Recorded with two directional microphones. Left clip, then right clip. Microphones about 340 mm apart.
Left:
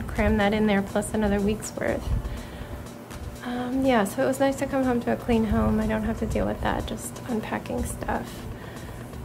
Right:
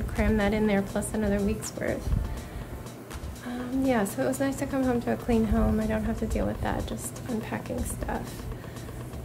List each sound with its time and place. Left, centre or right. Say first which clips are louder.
0.1 s speech: left 4 dB; centre
3.8 s speech: left 4 dB; centre